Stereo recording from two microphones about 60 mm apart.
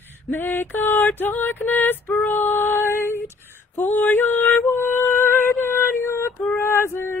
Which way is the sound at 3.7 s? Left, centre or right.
Left.